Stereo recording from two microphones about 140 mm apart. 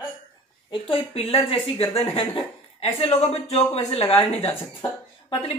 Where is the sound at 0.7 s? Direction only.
40° left (ahead or behind).